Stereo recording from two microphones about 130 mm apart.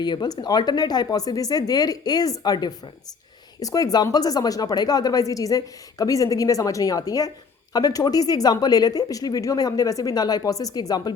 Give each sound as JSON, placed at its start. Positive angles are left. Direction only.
{"t": 0.0, "sound": "speech", "side_deg": 35}